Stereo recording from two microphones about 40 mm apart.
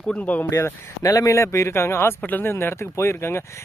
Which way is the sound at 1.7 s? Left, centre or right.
Left.